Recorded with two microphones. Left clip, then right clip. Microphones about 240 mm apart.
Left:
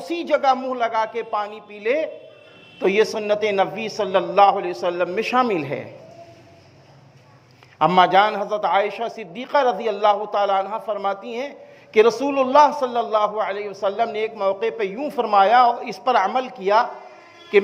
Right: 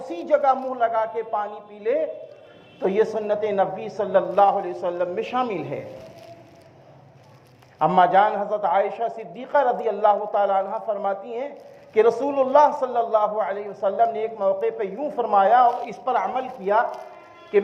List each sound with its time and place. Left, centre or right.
0.0 s a man's voice: left
7.8 s a man's voice: left